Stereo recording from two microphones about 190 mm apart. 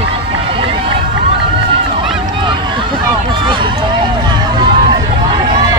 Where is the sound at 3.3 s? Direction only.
25° right (ahead or behind).